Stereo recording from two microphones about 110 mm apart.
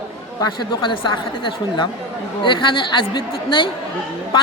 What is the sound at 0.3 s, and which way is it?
Speech, 40° left (ahead or behind).